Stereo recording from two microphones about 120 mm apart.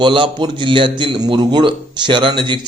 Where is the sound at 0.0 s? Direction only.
40° right (ahead or behind).